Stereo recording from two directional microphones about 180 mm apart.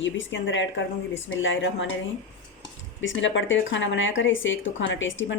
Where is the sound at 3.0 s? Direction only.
90° left.